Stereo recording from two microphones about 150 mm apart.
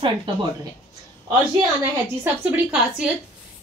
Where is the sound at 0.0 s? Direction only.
35° right (ahead or behind).